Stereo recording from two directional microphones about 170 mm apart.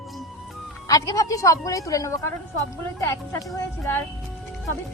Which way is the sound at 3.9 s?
10° left (ahead or behind).